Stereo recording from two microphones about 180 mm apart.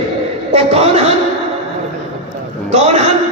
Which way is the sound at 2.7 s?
35° right (ahead or behind).